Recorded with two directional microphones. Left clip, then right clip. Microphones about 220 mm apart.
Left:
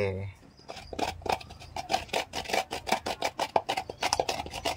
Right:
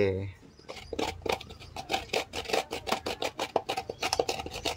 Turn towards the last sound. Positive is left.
turn(degrees=5)  # may be behind; listen again after turning